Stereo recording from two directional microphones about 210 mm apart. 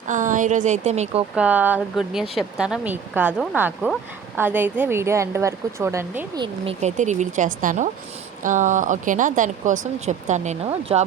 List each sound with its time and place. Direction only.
0.1 s speech: 35° right (ahead or behind)
1.4 s speech: 5° right (ahead or behind)
6.8 s speech: 35° right (ahead or behind)